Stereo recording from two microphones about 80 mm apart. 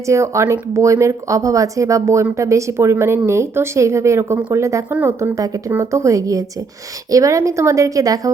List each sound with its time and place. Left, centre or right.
0.1 s a woman's voice: right